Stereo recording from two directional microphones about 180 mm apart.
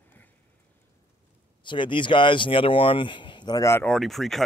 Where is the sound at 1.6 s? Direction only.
25° left (ahead or behind).